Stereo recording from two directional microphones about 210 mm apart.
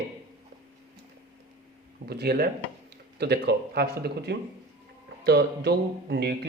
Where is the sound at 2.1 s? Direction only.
50° right (ahead or behind).